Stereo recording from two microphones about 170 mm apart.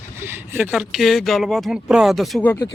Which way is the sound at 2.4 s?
15° left (ahead or behind).